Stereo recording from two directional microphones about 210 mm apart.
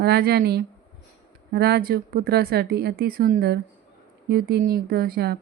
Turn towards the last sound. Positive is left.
turn(degrees=-50)  # may be behind; listen again after turning